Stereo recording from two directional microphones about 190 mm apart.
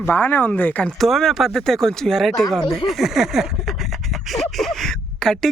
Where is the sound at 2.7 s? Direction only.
Centre (ahead or behind).